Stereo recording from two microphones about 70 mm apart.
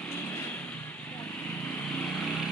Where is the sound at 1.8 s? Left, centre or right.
Centre.